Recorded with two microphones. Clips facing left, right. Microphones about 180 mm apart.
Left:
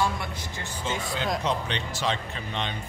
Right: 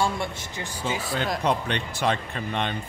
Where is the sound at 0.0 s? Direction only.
25° right (ahead or behind).